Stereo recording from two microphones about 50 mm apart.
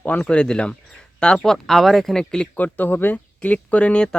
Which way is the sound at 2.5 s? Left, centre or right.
Left.